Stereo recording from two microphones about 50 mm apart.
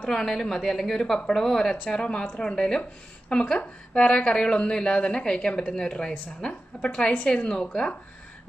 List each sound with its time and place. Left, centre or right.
0.0 s speech: centre; by 7.4 s left
7.4 s speech: centre